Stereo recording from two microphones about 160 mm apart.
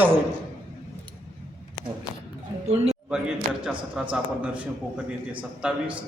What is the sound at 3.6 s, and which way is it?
Speech, 10° right (ahead or behind).